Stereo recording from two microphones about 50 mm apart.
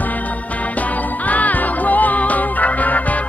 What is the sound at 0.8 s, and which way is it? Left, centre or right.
Music, left.